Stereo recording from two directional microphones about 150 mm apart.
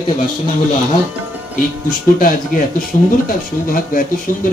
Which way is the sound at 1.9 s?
70° left (ahead or behind).